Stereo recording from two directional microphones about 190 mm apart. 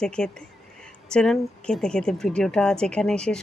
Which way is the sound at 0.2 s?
5° left (ahead or behind).